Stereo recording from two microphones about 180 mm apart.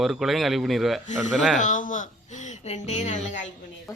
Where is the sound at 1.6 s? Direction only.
45° left (ahead or behind).